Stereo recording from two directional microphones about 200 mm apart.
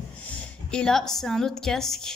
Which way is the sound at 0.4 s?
5° left (ahead or behind).